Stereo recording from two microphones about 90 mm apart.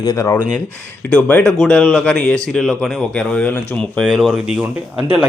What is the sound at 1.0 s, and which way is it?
Speech, 20° left (ahead or behind).